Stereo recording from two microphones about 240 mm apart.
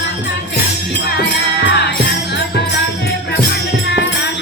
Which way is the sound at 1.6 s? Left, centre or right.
Left.